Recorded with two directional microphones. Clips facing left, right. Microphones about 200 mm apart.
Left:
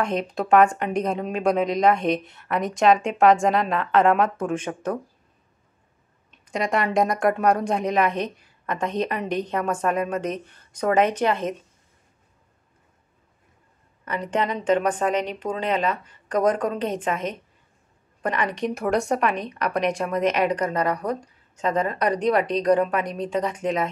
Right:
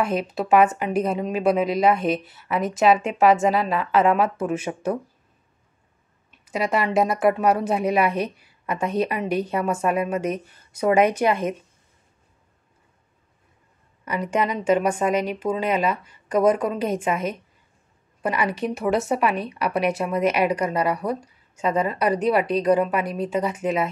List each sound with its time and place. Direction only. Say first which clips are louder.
0.0 s speech: right 1 dB; 5° right (ahead or behind)
6.4 s a woman's voice: right 1 dB; 5° right (ahead or behind)
14.0 s a woman's voice: right 1 dB; 10° right (ahead or behind)